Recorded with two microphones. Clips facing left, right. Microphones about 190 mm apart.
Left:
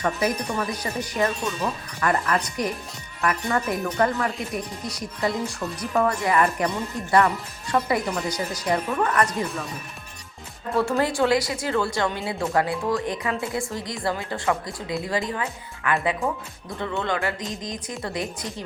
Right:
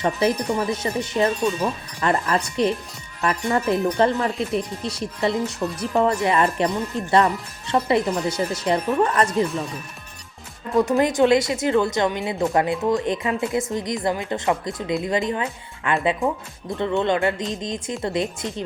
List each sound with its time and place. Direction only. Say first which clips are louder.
0.0 s speech: right 3 dB; 25° right (ahead or behind)
7.7 s speech: right 3 dB; 25° right (ahead or behind)
10.8 s speech: right 4 dB; 15° right (ahead or behind)
16.2 s speech: right 3 dB; centre (ahead or behind)
16.7 s speech: right 6 dB; 20° right (ahead or behind)